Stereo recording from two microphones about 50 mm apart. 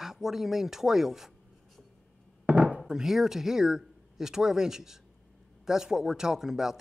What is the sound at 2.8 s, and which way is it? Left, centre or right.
Speech, centre.